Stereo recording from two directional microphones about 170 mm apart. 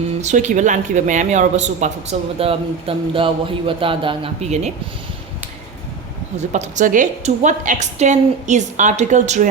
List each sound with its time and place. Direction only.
0.2 s speech: 45° right (ahead or behind)
6.3 s a woman's voice: 45° right (ahead or behind)